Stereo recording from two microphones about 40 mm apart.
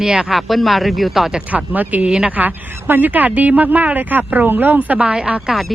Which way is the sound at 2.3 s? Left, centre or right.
Right.